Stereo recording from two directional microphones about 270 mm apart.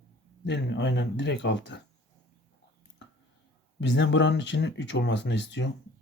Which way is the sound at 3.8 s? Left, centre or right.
Left.